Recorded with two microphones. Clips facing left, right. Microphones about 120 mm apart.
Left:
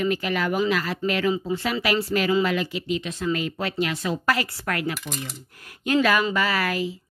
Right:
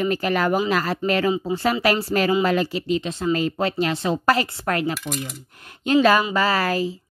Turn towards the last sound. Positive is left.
turn(degrees=-35)  # may be behind; listen again after turning